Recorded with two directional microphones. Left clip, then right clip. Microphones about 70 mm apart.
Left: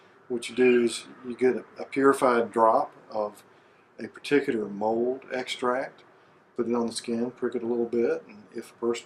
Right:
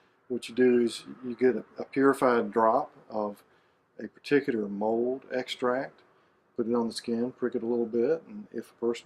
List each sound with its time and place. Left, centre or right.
0.4 s speech: left